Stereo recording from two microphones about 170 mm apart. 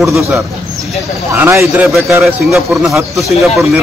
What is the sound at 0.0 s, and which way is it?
Speech, centre (ahead or behind).